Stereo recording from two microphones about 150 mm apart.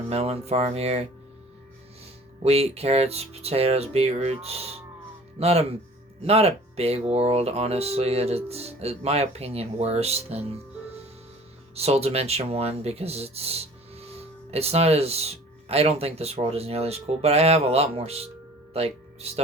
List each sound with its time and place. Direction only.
0.1 s speech: 45° right (ahead or behind)
2.4 s speech: 45° right (ahead or behind)
11.7 s speech: 40° right (ahead or behind)
18.7 s music: 45° right (ahead or behind)